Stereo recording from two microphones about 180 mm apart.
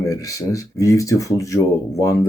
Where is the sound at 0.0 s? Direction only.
20° left (ahead or behind).